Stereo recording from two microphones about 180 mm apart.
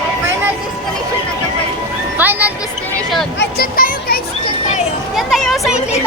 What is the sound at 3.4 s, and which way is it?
Music, 60° left (ahead or behind).